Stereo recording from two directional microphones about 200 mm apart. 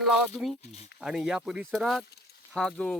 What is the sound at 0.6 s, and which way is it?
Speech, 30° left (ahead or behind).